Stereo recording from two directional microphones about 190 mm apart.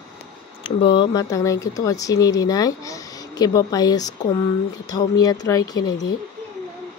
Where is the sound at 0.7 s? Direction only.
25° left (ahead or behind).